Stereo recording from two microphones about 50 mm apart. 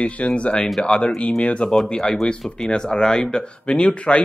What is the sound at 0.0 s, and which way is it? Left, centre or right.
Speech, left.